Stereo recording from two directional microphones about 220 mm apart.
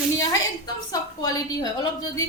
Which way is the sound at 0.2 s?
15° left (ahead or behind).